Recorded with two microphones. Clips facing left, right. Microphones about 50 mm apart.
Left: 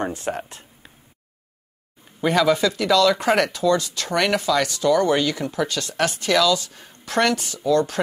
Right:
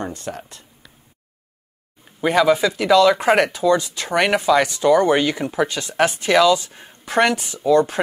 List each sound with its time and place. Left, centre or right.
0.2 s speech: left
2.2 s speech: centre